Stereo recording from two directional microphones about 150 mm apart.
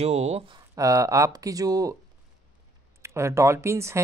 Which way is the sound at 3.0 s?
20° right (ahead or behind).